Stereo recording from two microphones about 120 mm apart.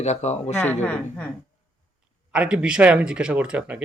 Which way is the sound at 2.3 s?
10° right (ahead or behind).